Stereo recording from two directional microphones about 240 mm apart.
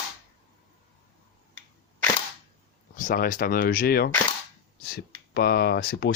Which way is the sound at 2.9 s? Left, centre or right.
Left.